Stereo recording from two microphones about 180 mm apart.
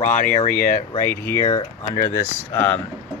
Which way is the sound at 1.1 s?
15° left (ahead or behind).